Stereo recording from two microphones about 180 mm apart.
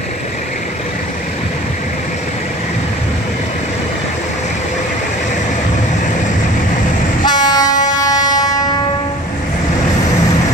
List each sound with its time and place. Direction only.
7.2 s train: 20° left (ahead or behind)